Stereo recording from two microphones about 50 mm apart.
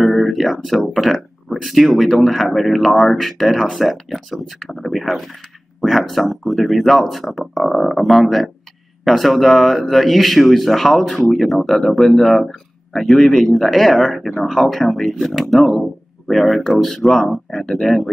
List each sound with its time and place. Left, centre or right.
0.0 s speech: centre